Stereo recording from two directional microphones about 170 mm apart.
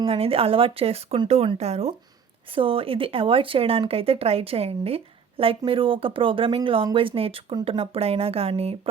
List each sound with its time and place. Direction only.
0.0 s speech: 35° right (ahead or behind)